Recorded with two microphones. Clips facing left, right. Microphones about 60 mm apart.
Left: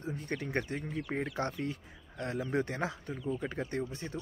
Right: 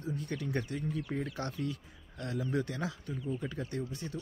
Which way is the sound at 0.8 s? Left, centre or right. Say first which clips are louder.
Even; left.